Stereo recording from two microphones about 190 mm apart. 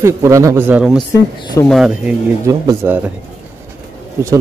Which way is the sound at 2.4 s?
15° right (ahead or behind).